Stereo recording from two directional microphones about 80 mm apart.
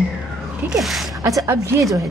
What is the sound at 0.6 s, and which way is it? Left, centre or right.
Speech, centre.